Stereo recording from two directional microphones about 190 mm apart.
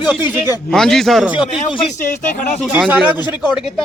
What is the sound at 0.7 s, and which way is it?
Speech, centre (ahead or behind).